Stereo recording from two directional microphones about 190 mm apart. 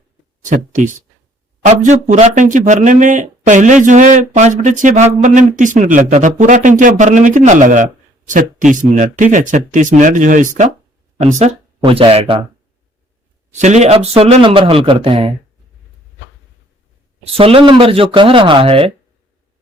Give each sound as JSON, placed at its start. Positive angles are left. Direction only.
{"t": 0.4, "sound": "speech", "side_deg": -40}
{"t": 13.6, "sound": "speech", "side_deg": -35}
{"t": 17.2, "sound": "speech", "side_deg": -30}